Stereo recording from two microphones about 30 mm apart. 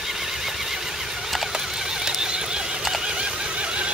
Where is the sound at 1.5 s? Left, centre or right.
Centre.